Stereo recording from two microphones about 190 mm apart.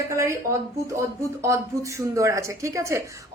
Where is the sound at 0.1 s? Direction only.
15° right (ahead or behind).